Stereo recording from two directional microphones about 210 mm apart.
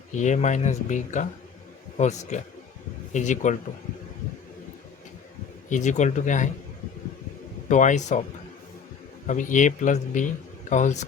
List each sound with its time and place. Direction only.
0.1 s speech: 35° left (ahead or behind)
5.6 s speech: 35° left (ahead or behind)
7.7 s speech: 35° left (ahead or behind)
9.2 s speech: 35° left (ahead or behind)